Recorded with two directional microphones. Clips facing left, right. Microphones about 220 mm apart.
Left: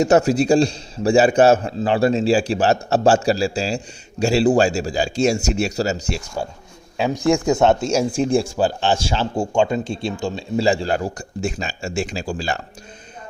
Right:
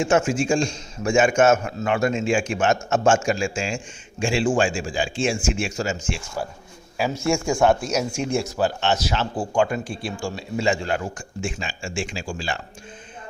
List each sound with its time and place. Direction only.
0.0 s a man's voice: 40° left (ahead or behind)
6.9 s speech: 20° left (ahead or behind)
10.6 s a man's voice: 35° left (ahead or behind)